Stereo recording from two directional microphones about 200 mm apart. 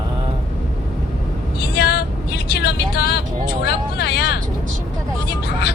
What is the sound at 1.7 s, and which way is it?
Vehicle, 55° left (ahead or behind).